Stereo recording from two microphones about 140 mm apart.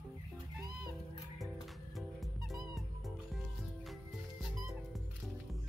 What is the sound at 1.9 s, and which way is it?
Music, centre (ahead or behind).